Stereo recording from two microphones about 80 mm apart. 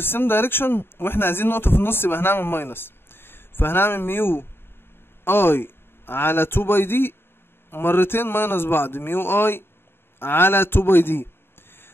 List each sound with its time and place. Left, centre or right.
0.0 s a man's voice: left